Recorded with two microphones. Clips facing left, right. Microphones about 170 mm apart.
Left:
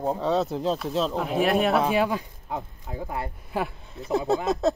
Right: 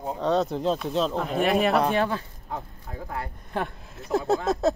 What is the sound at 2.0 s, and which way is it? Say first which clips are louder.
Speech: left 1 dB; 15° left (ahead or behind).